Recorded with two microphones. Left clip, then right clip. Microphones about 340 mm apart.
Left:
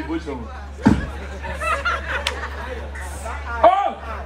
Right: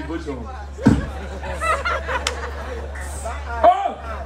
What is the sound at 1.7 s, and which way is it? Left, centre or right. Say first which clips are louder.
Fowl: right 1 dB; right.